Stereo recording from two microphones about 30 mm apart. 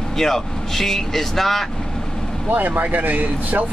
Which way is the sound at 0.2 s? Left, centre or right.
Centre.